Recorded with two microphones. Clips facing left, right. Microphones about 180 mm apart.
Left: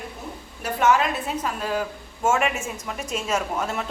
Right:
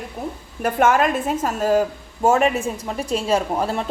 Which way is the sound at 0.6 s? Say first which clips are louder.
Right 4 dB; 50° right (ahead or behind).